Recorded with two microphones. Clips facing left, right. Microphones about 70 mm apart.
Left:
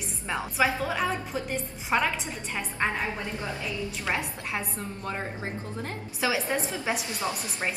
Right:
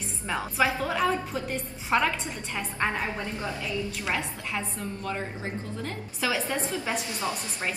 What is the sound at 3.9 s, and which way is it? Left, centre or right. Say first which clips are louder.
A woman's voice: even; left.